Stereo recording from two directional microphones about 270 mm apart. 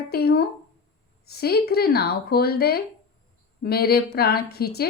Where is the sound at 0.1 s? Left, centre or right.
Left.